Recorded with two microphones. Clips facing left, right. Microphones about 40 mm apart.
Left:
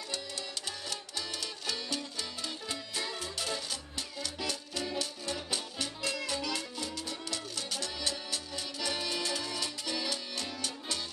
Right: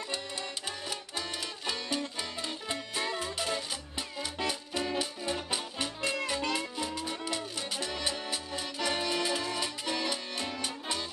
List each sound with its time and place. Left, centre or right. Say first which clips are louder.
0.8 s music: right 2 dB; right